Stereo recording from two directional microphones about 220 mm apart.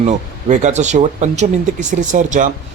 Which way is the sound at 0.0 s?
35° right (ahead or behind).